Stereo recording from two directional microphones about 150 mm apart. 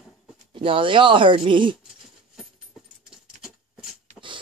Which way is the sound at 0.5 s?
35° right (ahead or behind).